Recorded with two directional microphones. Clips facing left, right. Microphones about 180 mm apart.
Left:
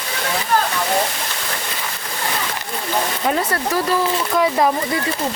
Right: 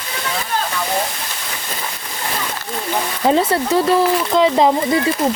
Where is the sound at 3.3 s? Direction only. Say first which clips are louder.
Right 7 dB; 25° right (ahead or behind).